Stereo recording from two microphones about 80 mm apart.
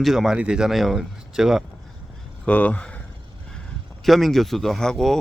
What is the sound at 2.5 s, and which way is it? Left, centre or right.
Speech, centre.